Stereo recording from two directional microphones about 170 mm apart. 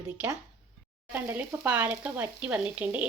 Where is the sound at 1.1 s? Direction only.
10° right (ahead or behind).